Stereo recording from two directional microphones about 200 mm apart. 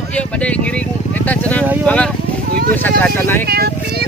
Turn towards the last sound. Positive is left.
turn(degrees=10)  # may be behind; listen again after turning